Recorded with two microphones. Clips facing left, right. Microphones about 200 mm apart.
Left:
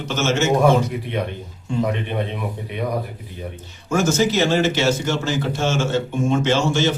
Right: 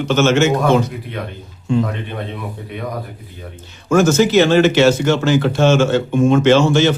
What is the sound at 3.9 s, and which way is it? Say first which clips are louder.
Speech: right 6 dB; 70° right (ahead or behind).